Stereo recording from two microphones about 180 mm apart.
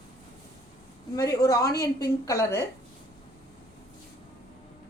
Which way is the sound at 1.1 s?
20° left (ahead or behind).